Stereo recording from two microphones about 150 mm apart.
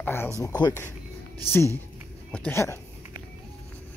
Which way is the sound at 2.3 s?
5° left (ahead or behind).